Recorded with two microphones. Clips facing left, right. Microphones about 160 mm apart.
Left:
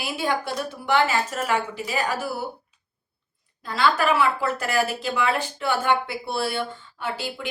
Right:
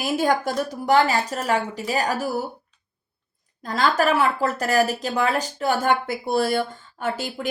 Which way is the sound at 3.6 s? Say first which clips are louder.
Right 1 dB; 45° right (ahead or behind).